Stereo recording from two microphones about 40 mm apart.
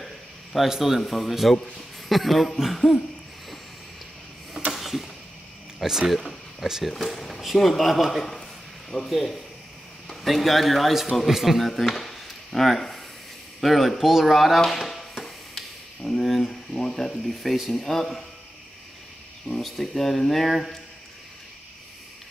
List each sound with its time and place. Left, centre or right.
0.6 s a man's voice: centre
4.7 s a sound: centre
5.8 s speech: centre
6.9 s speech: centre
8.9 s speech: centre
10.2 s speech: centre
14.6 s chop: centre
15.2 s a sound: centre
16.4 s speech: centre
19.6 s speech: centre